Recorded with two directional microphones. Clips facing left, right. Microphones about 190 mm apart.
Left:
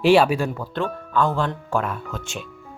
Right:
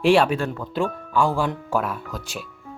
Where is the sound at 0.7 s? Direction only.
10° right (ahead or behind).